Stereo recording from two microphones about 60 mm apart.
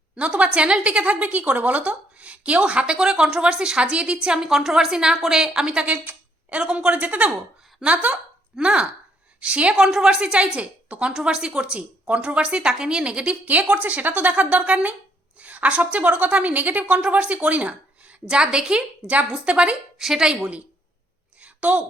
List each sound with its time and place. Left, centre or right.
0.2 s a woman's voice: centre
11.1 s speech: centre
20.0 s a woman's voice: centre
21.4 s a sound: right